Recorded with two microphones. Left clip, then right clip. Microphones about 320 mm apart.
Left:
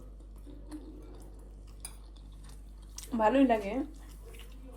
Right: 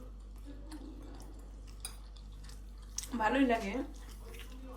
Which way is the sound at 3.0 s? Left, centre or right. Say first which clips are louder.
Left 5 dB; centre.